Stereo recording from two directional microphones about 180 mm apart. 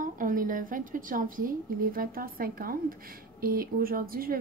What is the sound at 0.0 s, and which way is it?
A woman's voice, 50° right (ahead or behind).